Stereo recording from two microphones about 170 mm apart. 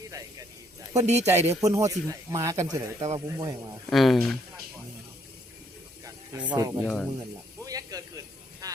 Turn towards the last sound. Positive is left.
turn(degrees=-20)  # may be behind; listen again after turning